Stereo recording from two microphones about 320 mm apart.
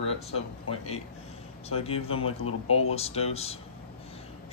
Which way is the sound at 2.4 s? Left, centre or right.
Left.